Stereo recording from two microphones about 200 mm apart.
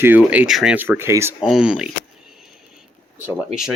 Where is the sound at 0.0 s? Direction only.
10° right (ahead or behind).